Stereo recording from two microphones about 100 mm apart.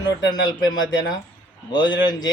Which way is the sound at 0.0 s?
45° left (ahead or behind).